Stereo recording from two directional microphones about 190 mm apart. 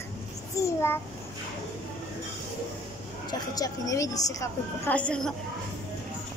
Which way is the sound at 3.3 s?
20° left (ahead or behind).